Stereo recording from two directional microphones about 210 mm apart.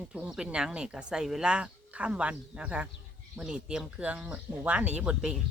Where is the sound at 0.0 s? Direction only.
5° right (ahead or behind).